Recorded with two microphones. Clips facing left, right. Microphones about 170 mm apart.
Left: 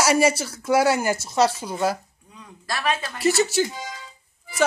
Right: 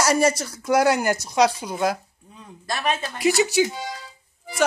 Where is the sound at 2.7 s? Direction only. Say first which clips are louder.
Even; 20° right (ahead or behind).